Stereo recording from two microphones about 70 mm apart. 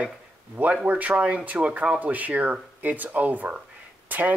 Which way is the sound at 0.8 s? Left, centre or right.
Right.